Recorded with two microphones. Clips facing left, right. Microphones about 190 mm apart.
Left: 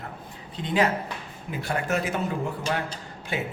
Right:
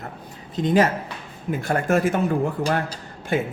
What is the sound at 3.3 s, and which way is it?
Speech, 50° right (ahead or behind).